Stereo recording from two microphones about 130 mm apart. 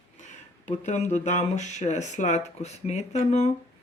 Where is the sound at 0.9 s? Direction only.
60° left (ahead or behind).